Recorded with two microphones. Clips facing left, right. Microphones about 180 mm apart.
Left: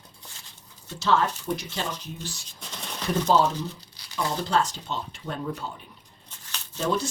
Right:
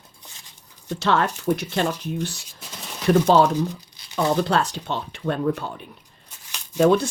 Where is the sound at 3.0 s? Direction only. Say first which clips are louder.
Right 6 dB; 65° right (ahead or behind).